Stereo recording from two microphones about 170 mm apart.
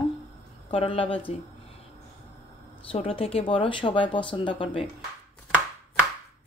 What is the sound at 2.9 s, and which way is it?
Speech, 30° left (ahead or behind).